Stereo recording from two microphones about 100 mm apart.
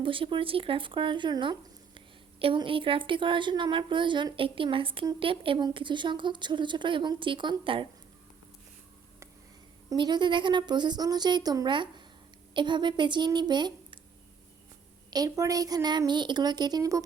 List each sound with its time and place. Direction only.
0.0 s a woman's voice: 60° right (ahead or behind)
10.0 s a woman's voice: 50° right (ahead or behind)
15.1 s a woman's voice: 40° right (ahead or behind)